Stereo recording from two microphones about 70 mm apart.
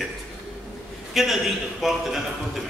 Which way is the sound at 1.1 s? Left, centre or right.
Centre.